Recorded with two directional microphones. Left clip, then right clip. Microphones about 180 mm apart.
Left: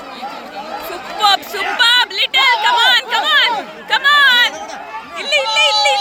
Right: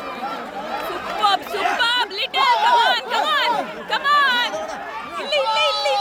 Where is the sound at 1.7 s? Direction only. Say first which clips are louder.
Left 12 dB; centre (ahead or behind).